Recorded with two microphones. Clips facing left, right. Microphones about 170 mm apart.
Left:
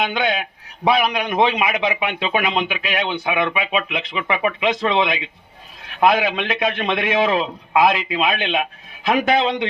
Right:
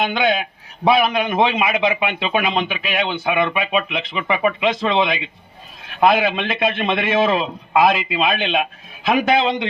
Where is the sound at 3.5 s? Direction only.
10° left (ahead or behind).